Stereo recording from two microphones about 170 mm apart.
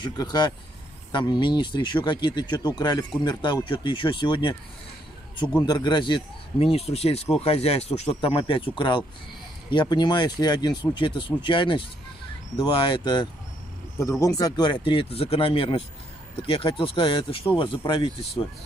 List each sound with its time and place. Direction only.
0.0 s speech: 25° left (ahead or behind)
5.7 s speech: 25° left (ahead or behind)